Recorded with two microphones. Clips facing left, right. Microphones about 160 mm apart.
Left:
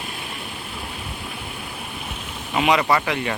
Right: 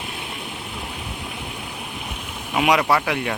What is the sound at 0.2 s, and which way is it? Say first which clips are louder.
Vehicle: right 1 dB; 15° right (ahead or behind).